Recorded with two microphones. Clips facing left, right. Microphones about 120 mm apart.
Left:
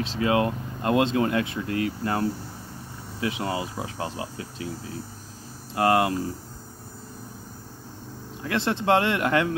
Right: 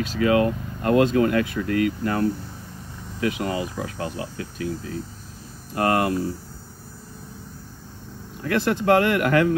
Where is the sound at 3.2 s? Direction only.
30° left (ahead or behind).